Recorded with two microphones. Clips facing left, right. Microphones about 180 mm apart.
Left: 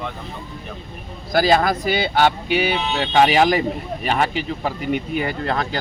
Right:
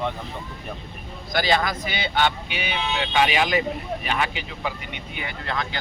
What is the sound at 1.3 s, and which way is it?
Speech, 40° left (ahead or behind).